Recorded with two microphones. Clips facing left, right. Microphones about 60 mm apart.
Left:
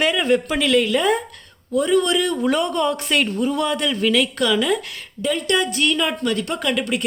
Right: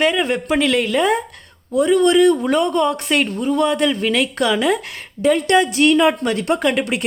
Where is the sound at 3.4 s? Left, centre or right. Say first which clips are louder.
Right 4 dB; centre.